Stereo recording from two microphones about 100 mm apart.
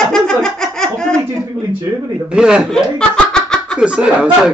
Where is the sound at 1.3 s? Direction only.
25° right (ahead or behind).